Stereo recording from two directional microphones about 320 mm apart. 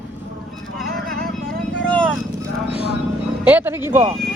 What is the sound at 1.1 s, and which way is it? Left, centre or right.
Vehicle, right.